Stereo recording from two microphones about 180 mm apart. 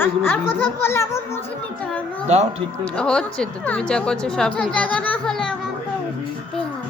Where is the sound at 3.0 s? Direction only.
5° left (ahead or behind).